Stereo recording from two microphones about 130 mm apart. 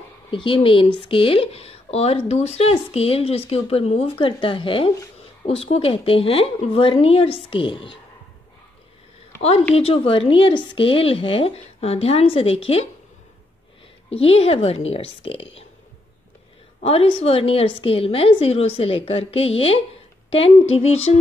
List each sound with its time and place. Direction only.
0.3 s speech: 40° left (ahead or behind)
9.8 s speech: 45° left (ahead or behind)
14.1 s speech: 50° left (ahead or behind)
16.8 s speech: 45° left (ahead or behind)